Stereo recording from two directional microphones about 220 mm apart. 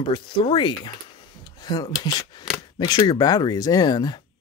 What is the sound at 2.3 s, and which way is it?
Chopping, 20° left (ahead or behind).